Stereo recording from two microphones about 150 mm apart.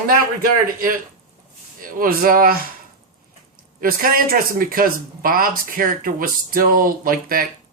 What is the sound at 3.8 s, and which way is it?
Speech, 70° right (ahead or behind).